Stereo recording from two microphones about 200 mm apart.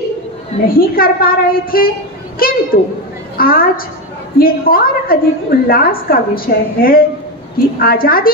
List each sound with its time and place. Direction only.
0.7 s a woman's voice: 45° left (ahead or behind)